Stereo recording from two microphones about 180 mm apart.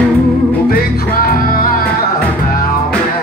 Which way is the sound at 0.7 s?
55° left (ahead or behind).